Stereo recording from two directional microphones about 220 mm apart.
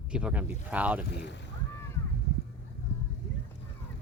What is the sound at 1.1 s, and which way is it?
Boat, 50° left (ahead or behind).